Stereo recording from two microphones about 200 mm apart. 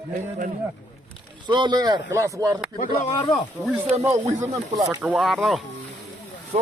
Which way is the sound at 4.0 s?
15° right (ahead or behind).